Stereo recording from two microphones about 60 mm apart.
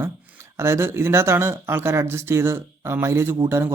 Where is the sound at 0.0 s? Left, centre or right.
Right.